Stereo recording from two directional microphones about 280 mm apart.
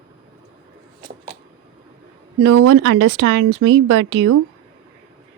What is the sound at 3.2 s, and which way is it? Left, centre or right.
Speech, right.